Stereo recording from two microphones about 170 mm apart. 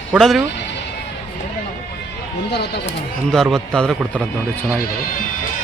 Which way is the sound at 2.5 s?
75° left (ahead or behind).